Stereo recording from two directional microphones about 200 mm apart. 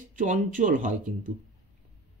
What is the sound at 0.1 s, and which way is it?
Speech, 40° right (ahead or behind).